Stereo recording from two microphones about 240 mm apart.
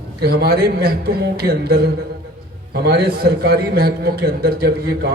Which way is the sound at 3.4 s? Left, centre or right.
Right.